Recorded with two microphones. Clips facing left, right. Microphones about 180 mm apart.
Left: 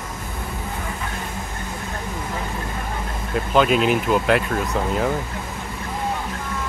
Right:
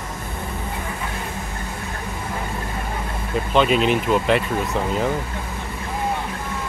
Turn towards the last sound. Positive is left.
turn(degrees=0)  # may be behind; listen again after turning